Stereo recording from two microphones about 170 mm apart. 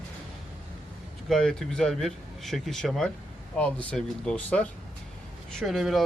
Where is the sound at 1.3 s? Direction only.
5° left (ahead or behind).